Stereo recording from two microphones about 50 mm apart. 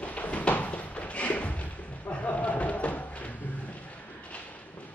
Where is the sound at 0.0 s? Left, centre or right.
Left.